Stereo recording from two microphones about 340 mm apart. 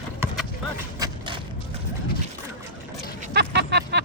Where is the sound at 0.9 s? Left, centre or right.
Centre.